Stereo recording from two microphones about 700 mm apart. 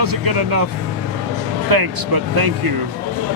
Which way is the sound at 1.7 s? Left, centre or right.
Right.